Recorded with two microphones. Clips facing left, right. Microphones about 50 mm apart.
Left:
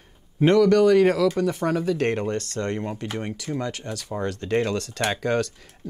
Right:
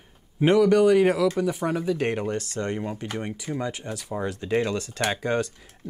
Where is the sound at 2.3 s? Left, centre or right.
Right.